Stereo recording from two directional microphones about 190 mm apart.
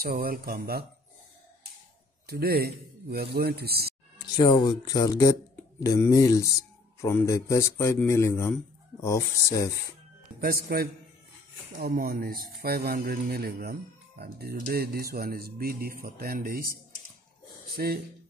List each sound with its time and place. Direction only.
0.0 s speech: 50° right (ahead or behind)
2.2 s a man's voice: 55° right (ahead or behind)
4.4 s speech: 20° left (ahead or behind)
10.4 s speech: 55° right (ahead or behind)
17.7 s speech: 50° right (ahead or behind)